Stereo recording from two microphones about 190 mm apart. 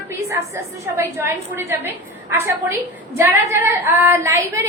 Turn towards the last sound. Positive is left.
turn(degrees=-15)  # may be behind; listen again after turning